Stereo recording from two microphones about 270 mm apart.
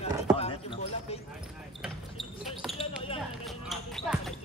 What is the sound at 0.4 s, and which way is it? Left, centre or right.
Basketball bounce, left.